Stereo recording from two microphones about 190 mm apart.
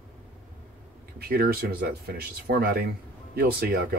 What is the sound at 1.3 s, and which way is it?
Speech, 50° right (ahead or behind).